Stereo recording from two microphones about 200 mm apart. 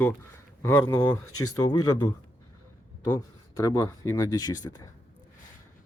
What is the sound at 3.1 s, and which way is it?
Speech, 15° left (ahead or behind).